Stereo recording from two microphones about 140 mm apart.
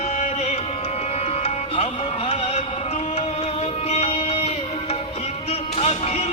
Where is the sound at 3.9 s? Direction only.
45° left (ahead or behind).